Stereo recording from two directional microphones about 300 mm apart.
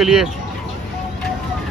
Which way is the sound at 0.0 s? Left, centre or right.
Centre.